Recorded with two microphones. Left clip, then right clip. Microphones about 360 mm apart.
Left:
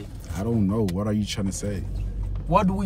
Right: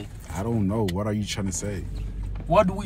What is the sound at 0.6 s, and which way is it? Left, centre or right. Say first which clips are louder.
Speech: even; centre.